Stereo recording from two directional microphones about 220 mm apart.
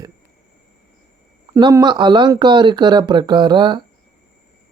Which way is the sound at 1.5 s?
15° right (ahead or behind).